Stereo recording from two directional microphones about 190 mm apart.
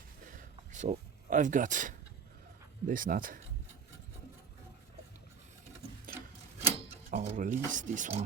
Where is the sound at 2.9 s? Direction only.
45° right (ahead or behind).